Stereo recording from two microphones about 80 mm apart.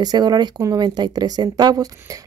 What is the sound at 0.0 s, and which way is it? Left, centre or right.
Speech, right.